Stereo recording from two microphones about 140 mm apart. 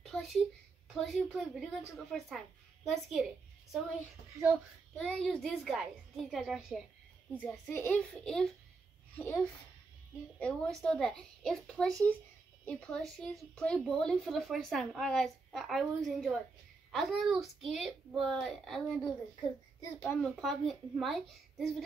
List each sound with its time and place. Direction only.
0.0 s a sound: centre (ahead or behind)
0.9 s a woman's voice: centre (ahead or behind)
4.9 s a woman's voice: 5° left (ahead or behind)
7.3 s a child's voice: 10° left (ahead or behind)
10.4 s a child's voice: 5° left (ahead or behind)
20.0 s a child's voice: 15° left (ahead or behind)
20.3 s a woman's voice: centre (ahead or behind)